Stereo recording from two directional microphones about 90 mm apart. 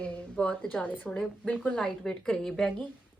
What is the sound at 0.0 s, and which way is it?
A woman's voice, 10° left (ahead or behind).